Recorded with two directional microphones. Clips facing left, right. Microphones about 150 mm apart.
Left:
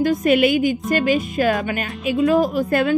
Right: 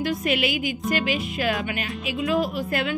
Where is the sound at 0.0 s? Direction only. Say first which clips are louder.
Left 8 dB; 45° left (ahead or behind).